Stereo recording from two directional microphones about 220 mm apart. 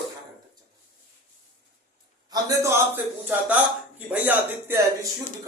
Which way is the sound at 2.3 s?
15° right (ahead or behind).